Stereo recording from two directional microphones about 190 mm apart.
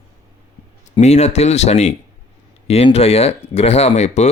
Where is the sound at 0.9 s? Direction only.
35° left (ahead or behind).